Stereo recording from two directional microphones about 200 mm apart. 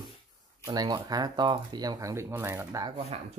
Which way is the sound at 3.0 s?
30° right (ahead or behind).